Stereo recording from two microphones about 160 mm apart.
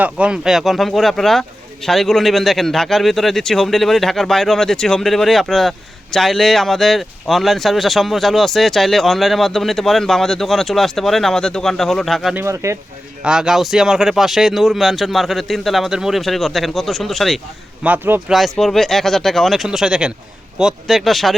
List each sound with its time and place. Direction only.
0.0 s speech: 5° right (ahead or behind)
12.4 s speech: 20° right (ahead or behind)
13.2 s speech: 5° right (ahead or behind)
17.8 s a man's voice: 10° right (ahead or behind)
18.3 s speech: centre (ahead or behind)